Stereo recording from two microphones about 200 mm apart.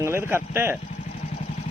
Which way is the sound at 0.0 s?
15° right (ahead or behind).